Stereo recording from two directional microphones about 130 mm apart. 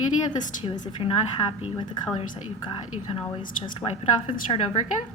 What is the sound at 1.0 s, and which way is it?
A woman's voice, 40° left (ahead or behind).